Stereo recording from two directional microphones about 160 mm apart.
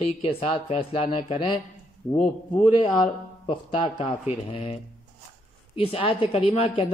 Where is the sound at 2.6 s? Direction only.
35° left (ahead or behind).